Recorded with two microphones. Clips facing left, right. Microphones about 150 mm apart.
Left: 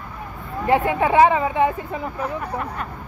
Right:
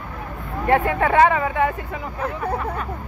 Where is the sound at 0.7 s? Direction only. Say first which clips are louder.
Even; 20° left (ahead or behind).